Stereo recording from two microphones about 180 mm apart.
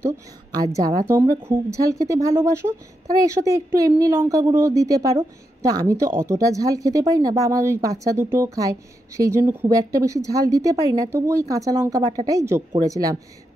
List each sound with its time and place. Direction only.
0.7 s speech: 20° right (ahead or behind)